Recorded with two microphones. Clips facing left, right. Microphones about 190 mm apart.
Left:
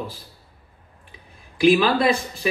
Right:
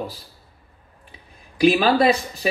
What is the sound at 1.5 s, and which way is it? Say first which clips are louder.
Speech: even; 40° right (ahead or behind).